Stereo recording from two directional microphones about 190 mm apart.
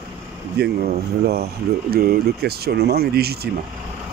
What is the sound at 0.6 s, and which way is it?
Speech, 55° right (ahead or behind).